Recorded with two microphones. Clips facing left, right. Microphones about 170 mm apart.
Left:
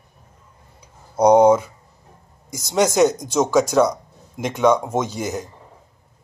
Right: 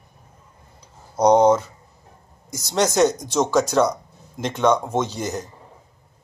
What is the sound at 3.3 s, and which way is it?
A man's voice, 5° left (ahead or behind).